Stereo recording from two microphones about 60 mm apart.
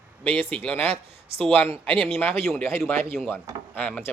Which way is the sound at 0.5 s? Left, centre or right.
Centre.